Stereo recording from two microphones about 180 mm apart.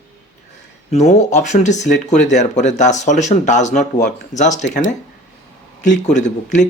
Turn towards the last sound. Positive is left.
turn(degrees=40)  # may be behind; listen again after turning